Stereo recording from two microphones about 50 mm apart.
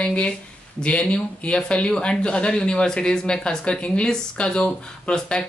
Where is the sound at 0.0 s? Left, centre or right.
Left.